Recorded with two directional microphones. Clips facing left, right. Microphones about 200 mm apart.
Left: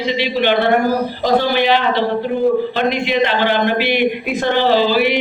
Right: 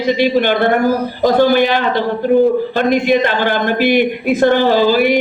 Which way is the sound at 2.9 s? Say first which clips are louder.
Right 4 dB; 45° right (ahead or behind).